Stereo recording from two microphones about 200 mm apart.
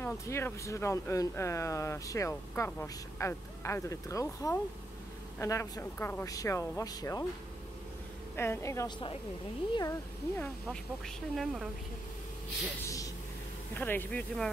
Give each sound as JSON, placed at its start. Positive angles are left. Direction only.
{"t": 0.0, "sound": "speech", "side_deg": 15}
{"t": 8.4, "sound": "speech", "side_deg": 15}
{"t": 11.3, "sound": "a woman's voice", "side_deg": -5}
{"t": 12.8, "sound": "a sound", "side_deg": 15}
{"t": 13.7, "sound": "speech", "side_deg": 10}